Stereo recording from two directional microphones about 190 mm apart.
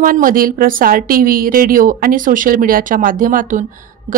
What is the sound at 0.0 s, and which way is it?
A woman's voice, 45° right (ahead or behind).